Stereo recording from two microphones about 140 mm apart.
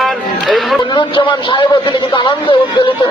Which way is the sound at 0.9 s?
35° left (ahead or behind).